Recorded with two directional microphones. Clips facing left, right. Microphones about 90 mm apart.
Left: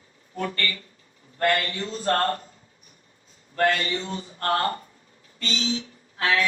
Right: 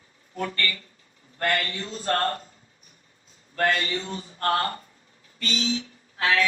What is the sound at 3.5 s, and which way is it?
Speech, 35° left (ahead or behind).